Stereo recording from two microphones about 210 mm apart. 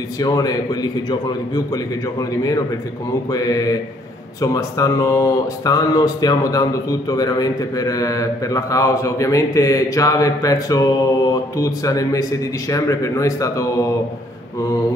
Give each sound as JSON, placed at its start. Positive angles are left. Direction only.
{"t": 0.2, "sound": "speech", "side_deg": 15}